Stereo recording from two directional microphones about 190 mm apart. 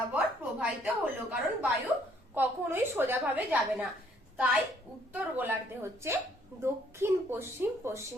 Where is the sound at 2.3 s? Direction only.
10° right (ahead or behind).